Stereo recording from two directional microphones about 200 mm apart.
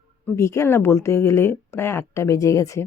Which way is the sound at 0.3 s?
15° left (ahead or behind).